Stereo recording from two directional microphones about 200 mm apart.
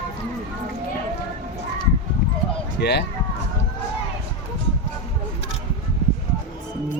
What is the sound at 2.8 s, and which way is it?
Speech, 55° left (ahead or behind).